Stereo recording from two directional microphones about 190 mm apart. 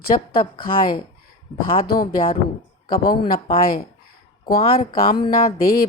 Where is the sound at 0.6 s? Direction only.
50° left (ahead or behind).